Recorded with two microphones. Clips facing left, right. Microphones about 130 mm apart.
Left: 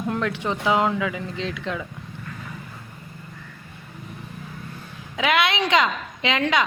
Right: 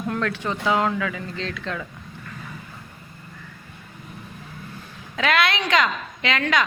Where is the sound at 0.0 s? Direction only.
20° left (ahead or behind).